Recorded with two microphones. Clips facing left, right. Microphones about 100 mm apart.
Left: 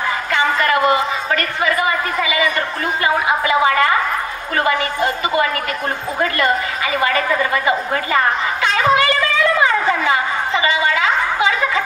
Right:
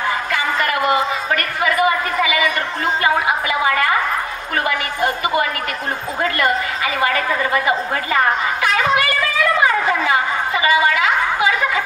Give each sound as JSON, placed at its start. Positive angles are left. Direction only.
{"t": 0.7, "sound": "a man's voice", "side_deg": 30}
{"t": 6.3, "sound": "a man's voice", "side_deg": 25}
{"t": 8.7, "sound": "a sound", "side_deg": 25}